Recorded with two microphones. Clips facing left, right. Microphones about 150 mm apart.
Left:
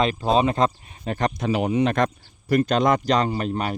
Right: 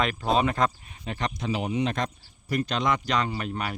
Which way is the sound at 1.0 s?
45° left (ahead or behind).